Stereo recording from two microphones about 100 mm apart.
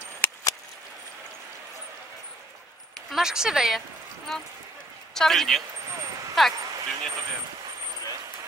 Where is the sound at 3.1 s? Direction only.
5° right (ahead or behind).